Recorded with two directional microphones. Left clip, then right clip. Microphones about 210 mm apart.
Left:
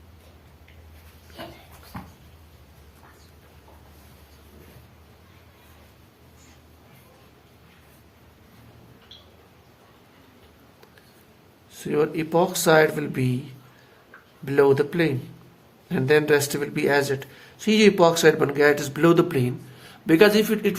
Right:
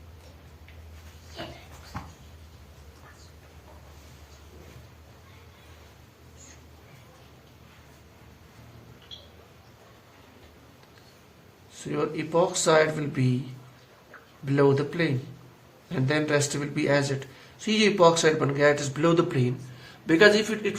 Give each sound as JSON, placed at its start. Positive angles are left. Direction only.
{"t": 11.7, "sound": "speech", "side_deg": 55}
{"t": 14.4, "sound": "speech", "side_deg": 55}